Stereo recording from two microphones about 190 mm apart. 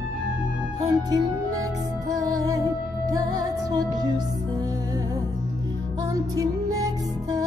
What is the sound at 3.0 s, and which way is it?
Music, 20° right (ahead or behind).